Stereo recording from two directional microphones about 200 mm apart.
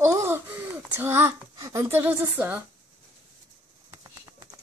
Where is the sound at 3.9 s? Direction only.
20° right (ahead or behind).